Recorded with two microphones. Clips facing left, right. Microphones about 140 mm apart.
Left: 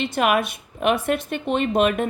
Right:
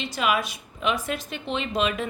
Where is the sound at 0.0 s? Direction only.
55° left (ahead or behind).